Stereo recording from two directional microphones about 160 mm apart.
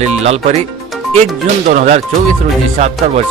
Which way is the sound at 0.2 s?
40° right (ahead or behind).